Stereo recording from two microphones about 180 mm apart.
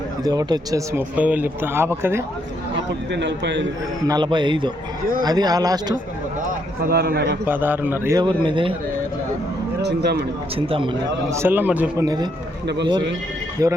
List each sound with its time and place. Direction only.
0.3 s speech: 20° right (ahead or behind)
0.9 s speech: 10° right (ahead or behind)
3.1 s speech: 75° right (ahead or behind)
4.0 s speech: 25° right (ahead or behind)
6.8 s a man's voice: 60° right (ahead or behind)
7.4 s speech: 10° right (ahead or behind); by 8.7 s 30° right (ahead or behind)
9.8 s a man's voice: 65° right (ahead or behind)
10.5 s speech: 30° right (ahead or behind)
11.3 s speech: 15° right (ahead or behind)
12.0 s speech: 20° right (ahead or behind)
12.6 s speech: 75° right (ahead or behind)
13.6 s speech: 20° right (ahead or behind)